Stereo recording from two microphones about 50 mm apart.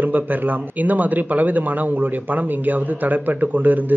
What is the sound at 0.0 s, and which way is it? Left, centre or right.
Speech, right.